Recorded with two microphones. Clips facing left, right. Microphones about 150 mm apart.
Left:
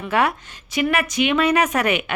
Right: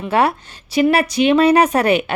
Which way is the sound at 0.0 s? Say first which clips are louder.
Right 4 dB; 30° right (ahead or behind).